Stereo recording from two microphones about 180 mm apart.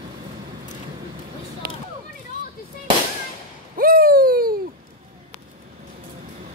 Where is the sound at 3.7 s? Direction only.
55° right (ahead or behind).